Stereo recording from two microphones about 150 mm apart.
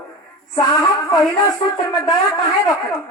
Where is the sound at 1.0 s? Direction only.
25° left (ahead or behind).